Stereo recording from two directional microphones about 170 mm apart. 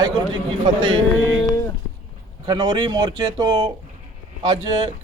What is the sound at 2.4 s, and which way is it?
Speech, 25° right (ahead or behind).